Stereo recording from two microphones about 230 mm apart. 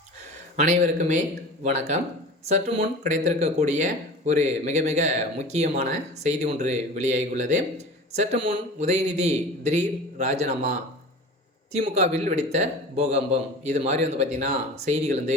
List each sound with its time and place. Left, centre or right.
0.5 s a man's voice: right